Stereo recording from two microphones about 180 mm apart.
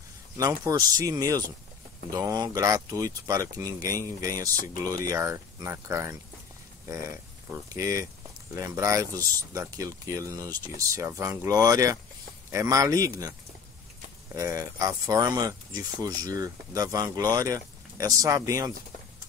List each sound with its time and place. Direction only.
0.4 s speech: 20° right (ahead or behind)
7.7 s speech: 20° right (ahead or behind)
14.3 s speech: 15° right (ahead or behind)